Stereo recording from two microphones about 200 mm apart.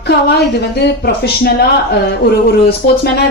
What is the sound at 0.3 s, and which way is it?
A woman's voice, 55° left (ahead or behind).